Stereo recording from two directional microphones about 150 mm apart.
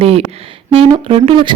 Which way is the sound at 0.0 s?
40° right (ahead or behind).